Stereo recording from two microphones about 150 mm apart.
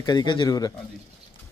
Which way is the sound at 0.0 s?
30° left (ahead or behind).